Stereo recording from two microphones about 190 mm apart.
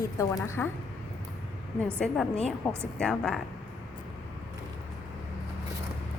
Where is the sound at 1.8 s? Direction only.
5° left (ahead or behind).